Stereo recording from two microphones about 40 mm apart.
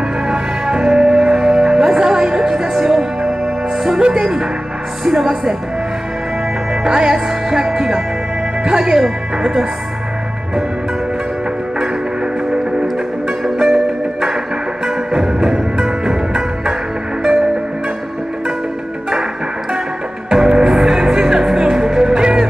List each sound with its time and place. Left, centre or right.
0.3 s music: centre
5.0 s speech: centre
6.7 s music: centre
8.6 s speech: centre
13.4 s music: centre
20.2 s music: centre